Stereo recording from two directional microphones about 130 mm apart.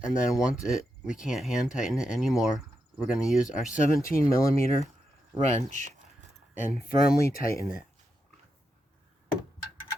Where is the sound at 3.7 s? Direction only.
90° left.